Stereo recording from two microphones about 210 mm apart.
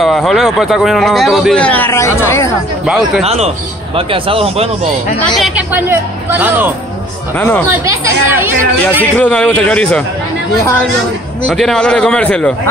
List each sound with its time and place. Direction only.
0.0 s a man's voice: centre (ahead or behind)
2.9 s a man's voice: centre (ahead or behind)
3.3 s a man's voice: 30° right (ahead or behind)
5.2 s speech: centre (ahead or behind)
7.3 s speech: 10° left (ahead or behind)
7.8 s speech: 15° right (ahead or behind)
9.2 s a man's voice: 5° left (ahead or behind)
11.4 s a man's voice: centre (ahead or behind)